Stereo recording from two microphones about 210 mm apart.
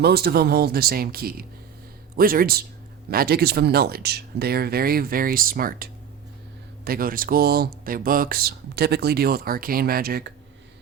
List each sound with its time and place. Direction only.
0.0 s speech: 50° right (ahead or behind)